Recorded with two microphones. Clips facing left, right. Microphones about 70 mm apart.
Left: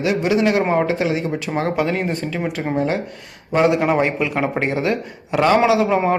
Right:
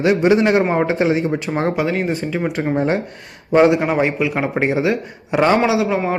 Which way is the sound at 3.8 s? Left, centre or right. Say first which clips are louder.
Even; centre.